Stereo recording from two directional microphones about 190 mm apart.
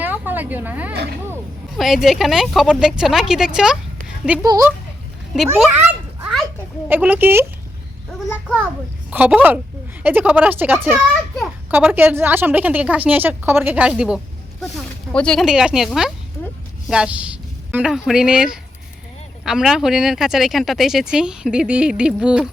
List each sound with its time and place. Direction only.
0.0 s a sound: 10° right (ahead or behind)
1.8 s speech: centre (ahead or behind)
4.4 s speech: 20° right (ahead or behind)
5.7 s children playing: 10° right (ahead or behind)
6.8 s a woman's voice: 10° right (ahead or behind)
9.0 s a woman's voice: 5° right (ahead or behind)